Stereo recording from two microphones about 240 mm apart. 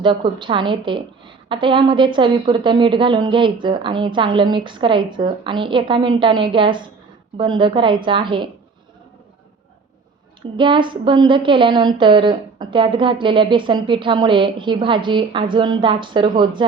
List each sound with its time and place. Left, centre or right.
0.0 s a woman's voice: centre
10.6 s a woman's voice: right